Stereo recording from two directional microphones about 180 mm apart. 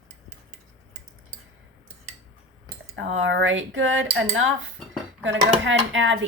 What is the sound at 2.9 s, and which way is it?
Speech, 90° right.